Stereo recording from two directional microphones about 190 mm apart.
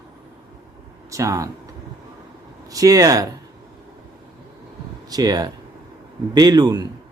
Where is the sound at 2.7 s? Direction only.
20° right (ahead or behind).